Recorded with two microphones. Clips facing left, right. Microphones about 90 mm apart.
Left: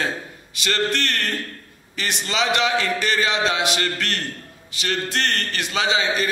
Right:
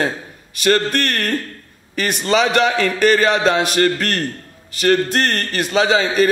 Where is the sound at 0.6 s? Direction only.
50° right (ahead or behind).